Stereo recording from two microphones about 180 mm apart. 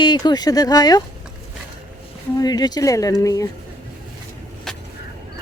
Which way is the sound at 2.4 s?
20° left (ahead or behind).